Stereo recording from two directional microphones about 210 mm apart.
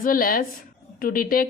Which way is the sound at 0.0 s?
40° left (ahead or behind).